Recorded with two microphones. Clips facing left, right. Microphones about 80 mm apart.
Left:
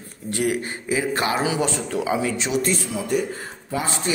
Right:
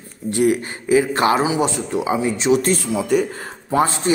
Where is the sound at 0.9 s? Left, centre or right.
Right.